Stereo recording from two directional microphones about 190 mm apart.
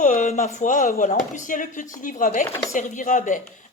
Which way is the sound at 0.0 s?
40° left (ahead or behind).